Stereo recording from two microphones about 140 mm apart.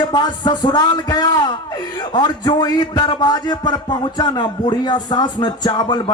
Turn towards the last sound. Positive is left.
turn(degrees=30)  # may be behind; listen again after turning